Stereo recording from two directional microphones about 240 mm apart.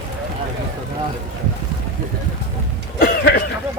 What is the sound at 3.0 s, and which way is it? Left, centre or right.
Cough, left.